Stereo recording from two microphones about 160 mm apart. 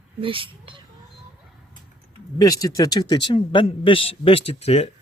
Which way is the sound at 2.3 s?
20° left (ahead or behind).